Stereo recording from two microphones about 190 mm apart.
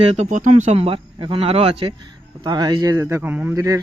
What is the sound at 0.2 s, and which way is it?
Speech, 40° right (ahead or behind).